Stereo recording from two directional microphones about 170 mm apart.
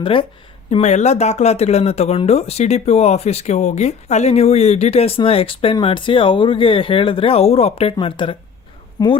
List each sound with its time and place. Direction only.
0.0 s speech: 30° left (ahead or behind)
0.7 s speech: 40° left (ahead or behind); by 9.1 s 25° left (ahead or behind)